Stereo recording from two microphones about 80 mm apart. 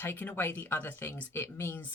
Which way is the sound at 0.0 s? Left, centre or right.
Left.